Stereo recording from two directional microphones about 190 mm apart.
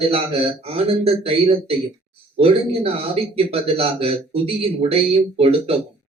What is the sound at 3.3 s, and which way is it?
Speech, 30° right (ahead or behind).